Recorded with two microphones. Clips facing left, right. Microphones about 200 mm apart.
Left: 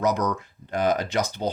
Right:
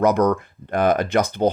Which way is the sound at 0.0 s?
55° right (ahead or behind).